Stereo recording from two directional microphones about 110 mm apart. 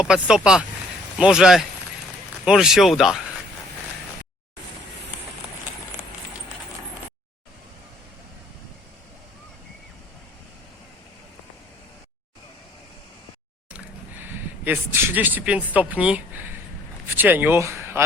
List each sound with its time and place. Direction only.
0.0 s speech: 5° right (ahead or behind)
13.7 s speech: 20° right (ahead or behind)